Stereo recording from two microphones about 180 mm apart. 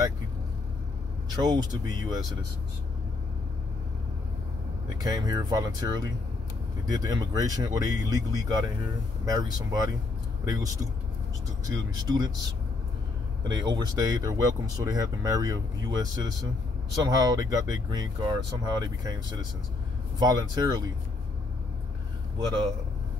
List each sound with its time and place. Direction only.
1.3 s speech: 25° right (ahead or behind)
5.0 s speech: 20° right (ahead or behind)
13.5 s speech: 25° right (ahead or behind)